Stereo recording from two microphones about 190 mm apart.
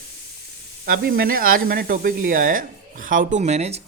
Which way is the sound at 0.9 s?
50° right (ahead or behind).